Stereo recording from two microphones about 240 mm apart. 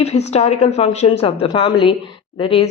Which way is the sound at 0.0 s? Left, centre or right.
Left.